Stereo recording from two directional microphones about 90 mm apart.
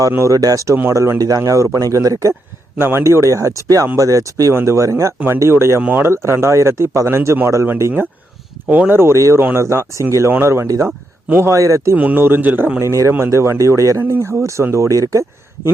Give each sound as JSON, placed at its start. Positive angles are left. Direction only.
{"t": 0.2, "sound": "speech", "side_deg": -35}
{"t": 8.6, "sound": "speech", "side_deg": -15}
{"t": 8.9, "sound": "speech", "side_deg": -25}
{"t": 11.9, "sound": "speech", "side_deg": -20}
{"t": 12.8, "sound": "speech", "side_deg": -35}